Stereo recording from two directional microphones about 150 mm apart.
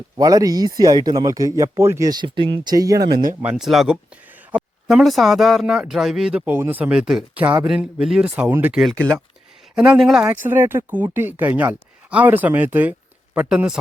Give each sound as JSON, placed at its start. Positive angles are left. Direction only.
{"t": 0.2, "sound": "speech", "side_deg": -25}
{"t": 3.4, "sound": "speech", "side_deg": -5}
{"t": 8.8, "sound": "speech", "side_deg": 5}
{"t": 10.4, "sound": "speech", "side_deg": -15}